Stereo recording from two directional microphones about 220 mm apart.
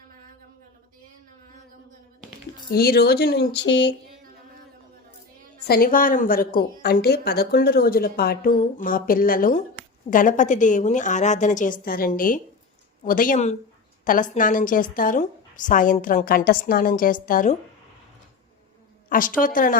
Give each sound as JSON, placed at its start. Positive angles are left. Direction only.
{"t": 2.7, "sound": "speech", "side_deg": 45}
{"t": 5.6, "sound": "speech", "side_deg": 45}
{"t": 19.0, "sound": "speech", "side_deg": 40}